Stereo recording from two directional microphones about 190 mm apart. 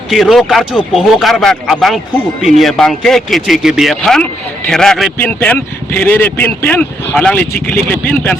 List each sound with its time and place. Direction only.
0.1 s a man's voice: centre (ahead or behind)